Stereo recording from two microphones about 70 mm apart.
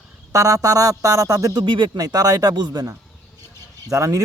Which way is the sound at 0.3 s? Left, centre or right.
Right.